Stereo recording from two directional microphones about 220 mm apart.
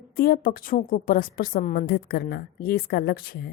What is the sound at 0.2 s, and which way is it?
A woman's voice, 40° left (ahead or behind).